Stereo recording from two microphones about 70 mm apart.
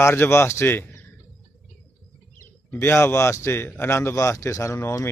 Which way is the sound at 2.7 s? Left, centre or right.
Left.